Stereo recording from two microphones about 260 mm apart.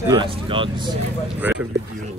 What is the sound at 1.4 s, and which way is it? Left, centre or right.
Speech, centre.